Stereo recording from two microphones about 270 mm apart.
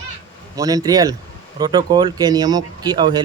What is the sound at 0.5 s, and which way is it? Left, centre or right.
Speech, centre.